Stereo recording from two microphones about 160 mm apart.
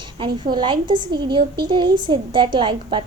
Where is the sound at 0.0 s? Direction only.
30° right (ahead or behind).